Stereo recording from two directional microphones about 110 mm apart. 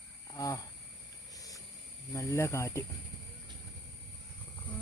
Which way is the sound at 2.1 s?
25° left (ahead or behind).